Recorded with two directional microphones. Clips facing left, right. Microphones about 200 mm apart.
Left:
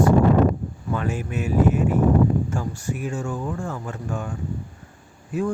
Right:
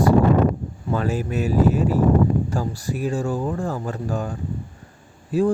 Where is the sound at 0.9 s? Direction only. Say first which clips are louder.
Right 4 dB; 35° right (ahead or behind).